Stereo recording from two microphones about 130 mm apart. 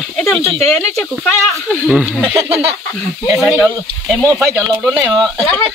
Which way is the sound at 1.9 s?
Centre (ahead or behind).